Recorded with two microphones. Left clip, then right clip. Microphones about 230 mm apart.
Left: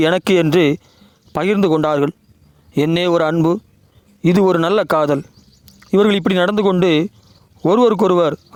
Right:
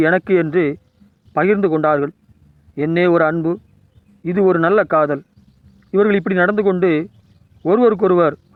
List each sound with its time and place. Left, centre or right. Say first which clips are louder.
0.0 s speech: left 1 dB; left